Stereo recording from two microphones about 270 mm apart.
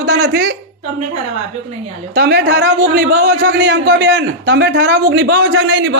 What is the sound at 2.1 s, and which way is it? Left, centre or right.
A man's voice, right.